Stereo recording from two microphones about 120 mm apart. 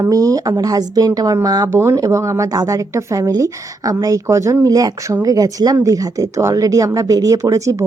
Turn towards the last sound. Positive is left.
turn(degrees=-25)  # may be behind; listen again after turning